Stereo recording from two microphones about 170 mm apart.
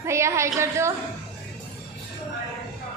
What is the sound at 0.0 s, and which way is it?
Speech, 15° right (ahead or behind).